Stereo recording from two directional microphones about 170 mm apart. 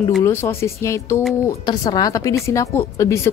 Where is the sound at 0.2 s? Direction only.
15° left (ahead or behind).